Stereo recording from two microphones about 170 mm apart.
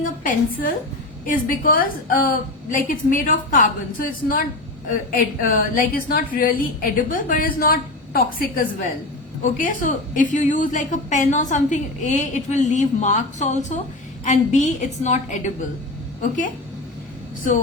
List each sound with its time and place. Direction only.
0.0 s a woman's voice: 55° left (ahead or behind)